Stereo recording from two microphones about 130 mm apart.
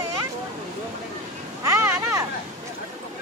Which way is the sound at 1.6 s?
25° right (ahead or behind).